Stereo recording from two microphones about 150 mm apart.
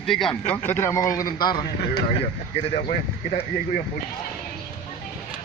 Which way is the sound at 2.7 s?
45° left (ahead or behind).